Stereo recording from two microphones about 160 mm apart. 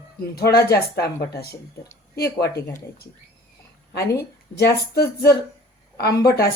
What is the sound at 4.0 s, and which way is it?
A woman's voice, 85° left.